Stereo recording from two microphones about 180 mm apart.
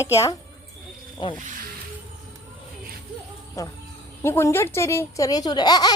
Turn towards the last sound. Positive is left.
turn(degrees=20)  # may be behind; listen again after turning